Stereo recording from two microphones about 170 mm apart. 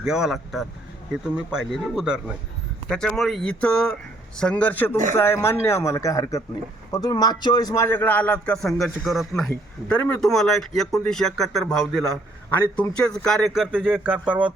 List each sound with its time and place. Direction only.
0.0 s a man's voice: 5° right (ahead or behind)